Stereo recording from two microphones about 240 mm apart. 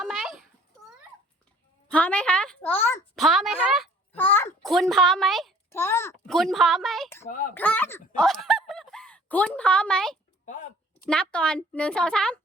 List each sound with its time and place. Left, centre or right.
0.0 s a sound: centre
1.9 s a child's voice: centre
7.3 s speech: left
7.5 s speech: centre
10.4 s a sound: left
11.0 s a child's voice: centre